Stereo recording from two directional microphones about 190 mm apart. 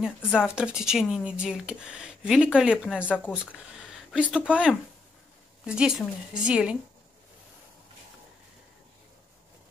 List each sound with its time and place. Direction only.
0.0 s speech: 5° right (ahead or behind)
3.0 s speech: 10° left (ahead or behind)
3.5 s a sound: 5° right (ahead or behind)
4.5 s speech: 5° right (ahead or behind)